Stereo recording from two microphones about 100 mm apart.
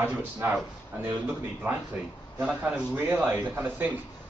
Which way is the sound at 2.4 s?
10° right (ahead or behind).